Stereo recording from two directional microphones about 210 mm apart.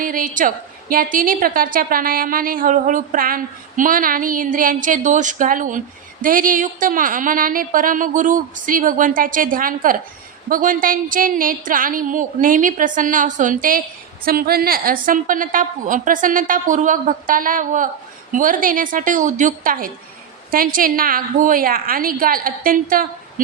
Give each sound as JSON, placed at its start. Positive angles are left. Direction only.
{"t": 0.0, "sound": "a woman's voice", "side_deg": -40}